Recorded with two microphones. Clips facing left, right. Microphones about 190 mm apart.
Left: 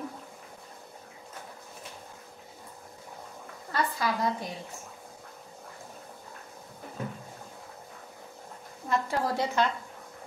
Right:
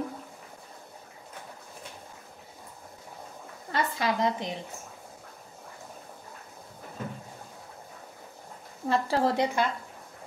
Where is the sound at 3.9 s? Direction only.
20° right (ahead or behind).